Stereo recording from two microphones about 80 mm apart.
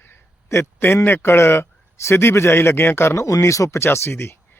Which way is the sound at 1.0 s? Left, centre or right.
Left.